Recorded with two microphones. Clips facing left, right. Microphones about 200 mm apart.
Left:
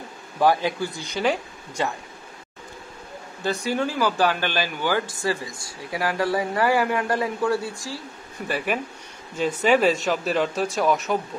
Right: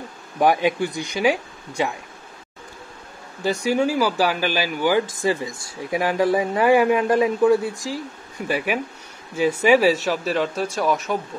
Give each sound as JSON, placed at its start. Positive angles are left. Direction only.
{"t": 0.4, "sound": "speech", "side_deg": -15}
{"t": 3.4, "sound": "speech", "side_deg": -10}